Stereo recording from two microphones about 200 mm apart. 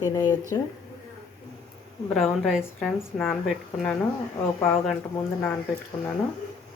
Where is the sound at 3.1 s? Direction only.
10° left (ahead or behind).